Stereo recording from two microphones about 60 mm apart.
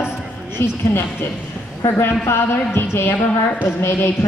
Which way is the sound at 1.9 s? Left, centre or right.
Left.